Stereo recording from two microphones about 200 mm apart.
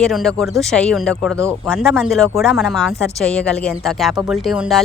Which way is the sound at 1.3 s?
15° right (ahead or behind).